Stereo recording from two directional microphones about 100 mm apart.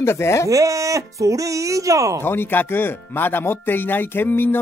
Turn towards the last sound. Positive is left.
turn(degrees=20)  # may be behind; listen again after turning